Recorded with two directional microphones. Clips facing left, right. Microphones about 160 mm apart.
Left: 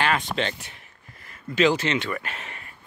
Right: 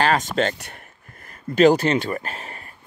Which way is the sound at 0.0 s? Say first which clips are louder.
Right 5 dB; 40° right (ahead or behind).